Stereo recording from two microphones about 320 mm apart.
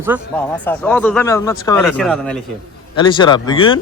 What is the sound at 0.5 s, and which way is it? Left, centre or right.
Speech, centre.